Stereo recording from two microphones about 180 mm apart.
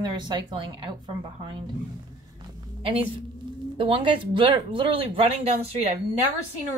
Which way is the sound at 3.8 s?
30° right (ahead or behind).